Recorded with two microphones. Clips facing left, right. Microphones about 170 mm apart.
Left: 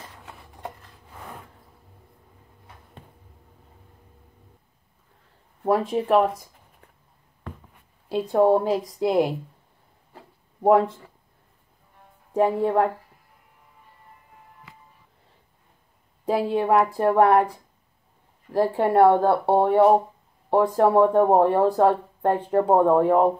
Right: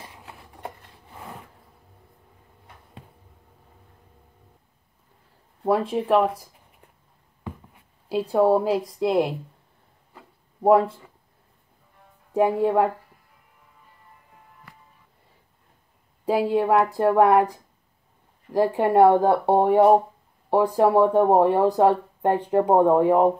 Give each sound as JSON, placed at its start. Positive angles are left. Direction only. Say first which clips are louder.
{"t": 0.2, "sound": "a sound", "louder": "even", "side_deg": 0}
{"t": 5.7, "sound": "a woman's voice", "louder": "even", "side_deg": 0}
{"t": 8.1, "sound": "a woman's voice", "louder": "even", "side_deg": -5}
{"t": 10.6, "sound": "speech", "louder": "even", "side_deg": -5}
{"t": 12.4, "sound": "speech", "louder": "right 1 dB", "side_deg": -5}
{"t": 16.3, "sound": "a woman's voice", "louder": "right 1 dB", "side_deg": -5}
{"t": 18.5, "sound": "speech", "louder": "right 1 dB", "side_deg": -10}
{"t": 22.5, "sound": "speech", "louder": "right 1 dB", "side_deg": -15}